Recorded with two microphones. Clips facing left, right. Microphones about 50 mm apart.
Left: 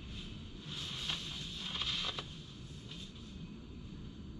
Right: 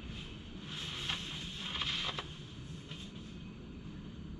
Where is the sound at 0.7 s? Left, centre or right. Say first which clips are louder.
Right 1 dB; right.